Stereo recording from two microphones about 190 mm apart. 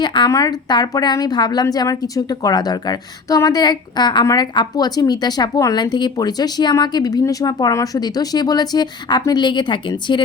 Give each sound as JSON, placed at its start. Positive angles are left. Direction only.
{"t": 0.0, "sound": "a woman's voice", "side_deg": 25}